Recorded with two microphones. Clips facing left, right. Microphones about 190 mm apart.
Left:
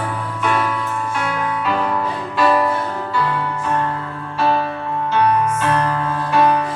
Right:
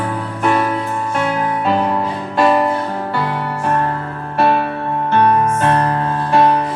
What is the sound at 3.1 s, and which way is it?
Music, 60° right (ahead or behind).